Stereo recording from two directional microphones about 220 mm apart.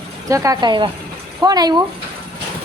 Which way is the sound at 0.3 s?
15° right (ahead or behind).